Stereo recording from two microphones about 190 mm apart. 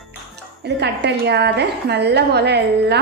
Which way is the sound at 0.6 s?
60° right (ahead or behind).